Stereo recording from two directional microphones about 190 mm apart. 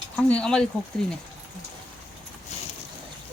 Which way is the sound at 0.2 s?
5° left (ahead or behind).